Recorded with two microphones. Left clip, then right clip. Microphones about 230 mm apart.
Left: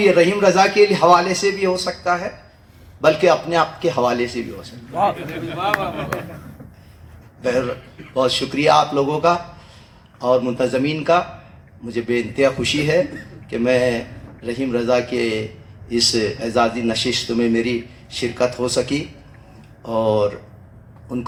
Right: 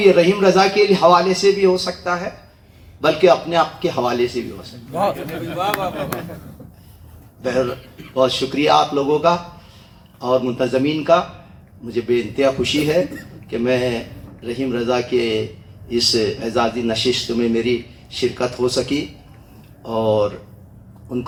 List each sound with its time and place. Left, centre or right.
0.0 s a man's voice: left
5.5 s speech: right
8.1 s a man's voice: left